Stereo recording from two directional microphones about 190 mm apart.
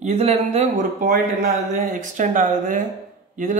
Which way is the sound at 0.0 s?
35° right (ahead or behind).